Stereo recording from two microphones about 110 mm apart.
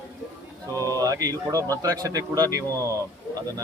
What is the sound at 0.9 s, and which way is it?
A man's voice, 30° right (ahead or behind).